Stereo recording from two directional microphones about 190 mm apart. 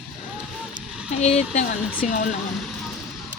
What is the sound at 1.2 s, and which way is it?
Speech, 35° left (ahead or behind).